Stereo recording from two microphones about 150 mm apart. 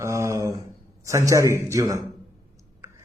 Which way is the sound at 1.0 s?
20° right (ahead or behind).